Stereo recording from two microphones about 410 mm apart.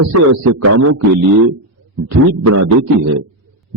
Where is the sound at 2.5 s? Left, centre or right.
Right.